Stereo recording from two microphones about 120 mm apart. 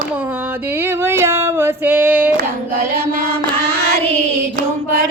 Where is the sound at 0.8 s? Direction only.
20° right (ahead or behind).